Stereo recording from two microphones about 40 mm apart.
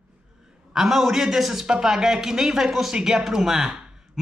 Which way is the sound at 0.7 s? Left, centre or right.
Centre.